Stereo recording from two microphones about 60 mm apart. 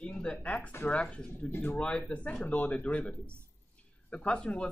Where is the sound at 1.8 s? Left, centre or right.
Centre.